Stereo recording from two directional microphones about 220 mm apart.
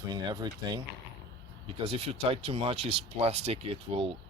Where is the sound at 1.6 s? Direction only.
25° right (ahead or behind).